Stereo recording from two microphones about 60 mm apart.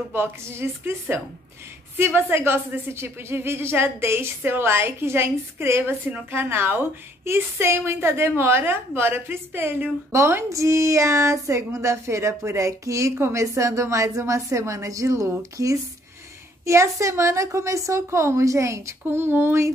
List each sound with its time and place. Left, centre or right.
0.1 s a woman's voice: right
10.1 s speech: right
16.6 s speech: right
19.0 s a woman's voice: right